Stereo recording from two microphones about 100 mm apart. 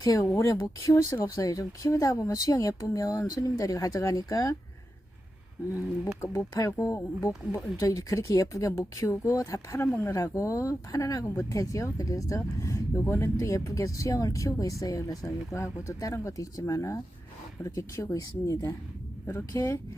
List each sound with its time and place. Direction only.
0.0 s speech: 35° left (ahead or behind)
6.2 s speech: 30° left (ahead or behind)